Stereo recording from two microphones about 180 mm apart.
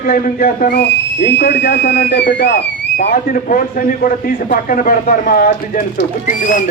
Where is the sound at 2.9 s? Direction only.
50° left (ahead or behind).